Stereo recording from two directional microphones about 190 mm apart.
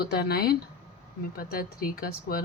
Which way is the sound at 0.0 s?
55° left (ahead or behind).